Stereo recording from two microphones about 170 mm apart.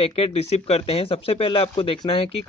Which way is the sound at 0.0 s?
35° left (ahead or behind).